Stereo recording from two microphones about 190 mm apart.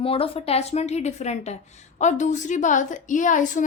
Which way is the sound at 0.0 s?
30° left (ahead or behind).